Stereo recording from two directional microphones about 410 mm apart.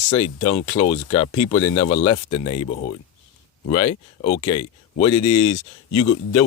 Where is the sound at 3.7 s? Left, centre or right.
Centre.